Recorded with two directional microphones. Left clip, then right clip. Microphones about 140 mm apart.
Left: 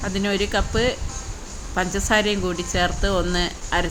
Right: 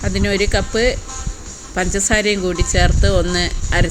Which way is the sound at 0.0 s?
15° right (ahead or behind).